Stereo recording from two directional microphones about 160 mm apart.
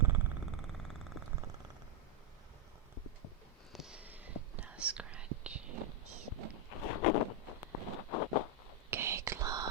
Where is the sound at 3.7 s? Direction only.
5° right (ahead or behind).